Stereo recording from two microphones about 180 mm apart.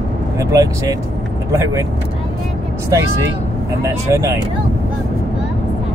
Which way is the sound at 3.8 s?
15° right (ahead or behind).